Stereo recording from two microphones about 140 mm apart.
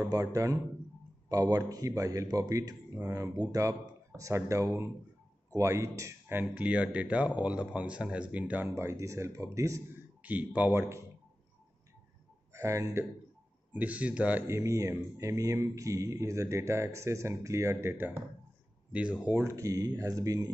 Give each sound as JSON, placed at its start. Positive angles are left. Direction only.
{"t": 0.1, "sound": "speech", "side_deg": -25}
{"t": 10.2, "sound": "speech", "side_deg": -10}
{"t": 12.5, "sound": "speech", "side_deg": -20}
{"t": 13.7, "sound": "speech", "side_deg": -10}
{"t": 14.6, "sound": "speech", "side_deg": -20}